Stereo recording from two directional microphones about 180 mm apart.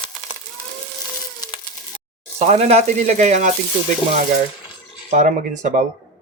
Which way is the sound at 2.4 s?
35° right (ahead or behind).